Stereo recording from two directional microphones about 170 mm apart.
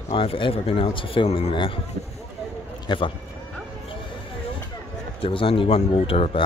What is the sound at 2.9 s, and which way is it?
Speech, 25° left (ahead or behind).